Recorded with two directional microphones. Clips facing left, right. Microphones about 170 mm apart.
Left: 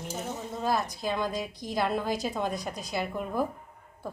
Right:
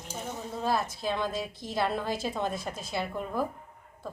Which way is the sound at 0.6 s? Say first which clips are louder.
Even; centre (ahead or behind).